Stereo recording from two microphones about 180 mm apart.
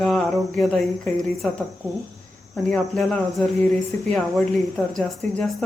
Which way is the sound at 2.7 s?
5° left (ahead or behind).